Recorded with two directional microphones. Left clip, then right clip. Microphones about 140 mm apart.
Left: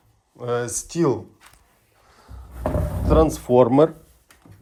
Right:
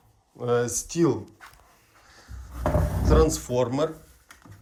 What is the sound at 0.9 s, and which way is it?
Speech, 10° right (ahead or behind).